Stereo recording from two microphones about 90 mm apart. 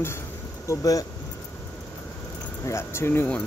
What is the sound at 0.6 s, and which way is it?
Speech, 35° left (ahead or behind).